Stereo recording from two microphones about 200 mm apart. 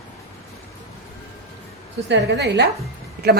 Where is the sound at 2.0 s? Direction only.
60° right (ahead or behind).